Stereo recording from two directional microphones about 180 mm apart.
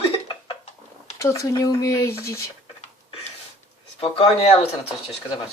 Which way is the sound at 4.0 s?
35° left (ahead or behind).